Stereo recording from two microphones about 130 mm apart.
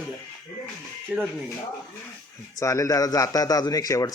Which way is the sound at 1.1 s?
10° right (ahead or behind).